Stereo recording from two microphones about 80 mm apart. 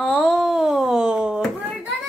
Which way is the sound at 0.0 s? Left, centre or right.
Centre.